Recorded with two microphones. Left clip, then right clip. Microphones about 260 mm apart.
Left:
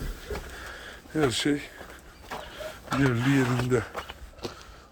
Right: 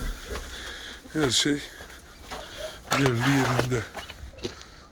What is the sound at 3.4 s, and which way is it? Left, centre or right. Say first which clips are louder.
Speech: even; centre.